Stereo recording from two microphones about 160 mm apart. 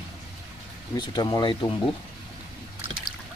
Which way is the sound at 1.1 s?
25° left (ahead or behind).